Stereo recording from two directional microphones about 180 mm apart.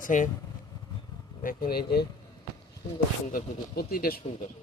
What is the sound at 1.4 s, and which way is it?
Speech, 55° left (ahead or behind).